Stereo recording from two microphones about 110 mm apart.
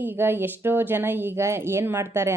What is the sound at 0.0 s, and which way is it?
A woman's voice, 20° right (ahead or behind).